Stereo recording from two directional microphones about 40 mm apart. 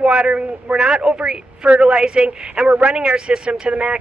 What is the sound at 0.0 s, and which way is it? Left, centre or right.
A woman's voice, right.